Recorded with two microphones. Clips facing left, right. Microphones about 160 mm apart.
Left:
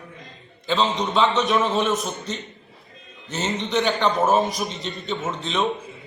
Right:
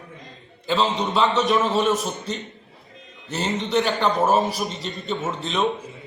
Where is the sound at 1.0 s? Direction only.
Centre (ahead or behind).